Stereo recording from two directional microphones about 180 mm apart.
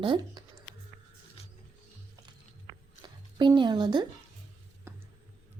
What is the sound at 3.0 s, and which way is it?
A woman's voice, 25° right (ahead or behind).